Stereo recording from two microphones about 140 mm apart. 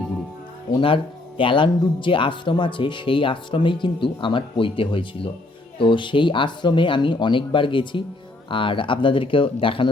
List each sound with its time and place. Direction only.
0.8 s speech: 40° left (ahead or behind)